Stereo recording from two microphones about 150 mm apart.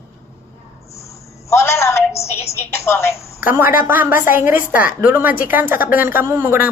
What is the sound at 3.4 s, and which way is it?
A woman's voice, 10° right (ahead or behind).